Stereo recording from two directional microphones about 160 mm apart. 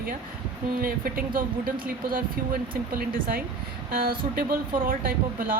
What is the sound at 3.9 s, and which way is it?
A woman's voice, 65° right (ahead or behind).